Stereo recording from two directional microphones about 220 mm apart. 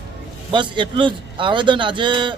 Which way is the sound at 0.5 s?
20° right (ahead or behind).